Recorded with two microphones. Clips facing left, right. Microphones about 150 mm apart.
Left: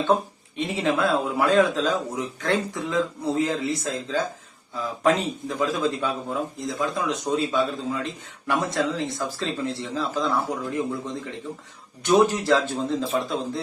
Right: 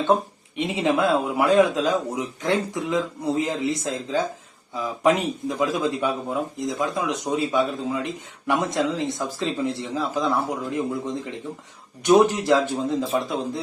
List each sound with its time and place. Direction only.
0.5 s speech: 20° right (ahead or behind)